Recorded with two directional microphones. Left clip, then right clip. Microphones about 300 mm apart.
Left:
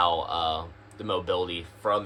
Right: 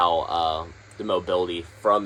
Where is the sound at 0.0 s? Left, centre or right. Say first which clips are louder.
Right 4 dB; right.